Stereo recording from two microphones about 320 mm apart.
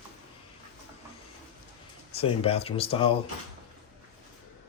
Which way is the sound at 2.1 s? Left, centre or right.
Centre.